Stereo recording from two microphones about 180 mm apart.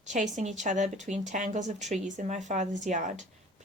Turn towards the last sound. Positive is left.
turn(degrees=-40)  # may be behind; listen again after turning